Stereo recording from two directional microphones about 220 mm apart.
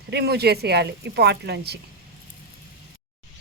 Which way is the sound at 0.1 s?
45° right (ahead or behind).